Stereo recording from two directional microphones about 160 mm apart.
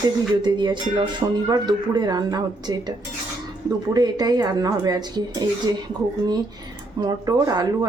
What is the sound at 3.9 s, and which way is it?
Speech, 25° right (ahead or behind).